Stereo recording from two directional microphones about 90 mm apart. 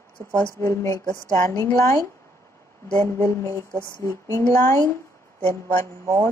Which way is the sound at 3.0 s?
30° left (ahead or behind).